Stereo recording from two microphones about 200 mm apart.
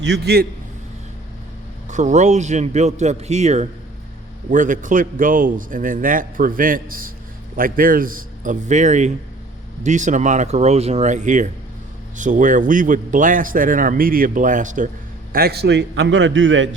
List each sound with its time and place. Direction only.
0.0 s a man's voice: 55° right (ahead or behind)
1.9 s a man's voice: 35° right (ahead or behind)
15.3 s a man's voice: 50° right (ahead or behind); by 16.6 s 70° right (ahead or behind)